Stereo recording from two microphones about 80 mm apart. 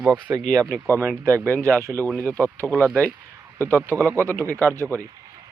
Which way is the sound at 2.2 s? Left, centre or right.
Right.